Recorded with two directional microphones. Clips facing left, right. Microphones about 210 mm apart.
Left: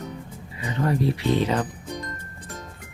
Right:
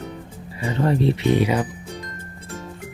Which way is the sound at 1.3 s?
10° right (ahead or behind).